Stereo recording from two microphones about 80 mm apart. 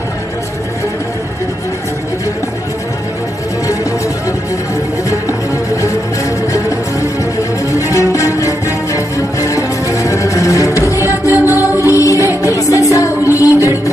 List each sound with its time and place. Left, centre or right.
7.7 s music: left